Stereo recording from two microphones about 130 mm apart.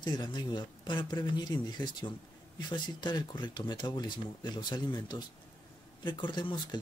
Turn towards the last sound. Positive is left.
turn(degrees=35)  # may be behind; listen again after turning